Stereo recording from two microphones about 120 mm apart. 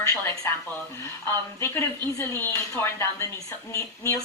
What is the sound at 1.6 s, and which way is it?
A woman's voice, 20° left (ahead or behind).